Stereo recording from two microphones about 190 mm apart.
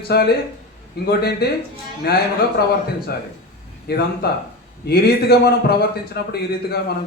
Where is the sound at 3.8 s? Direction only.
55° left (ahead or behind).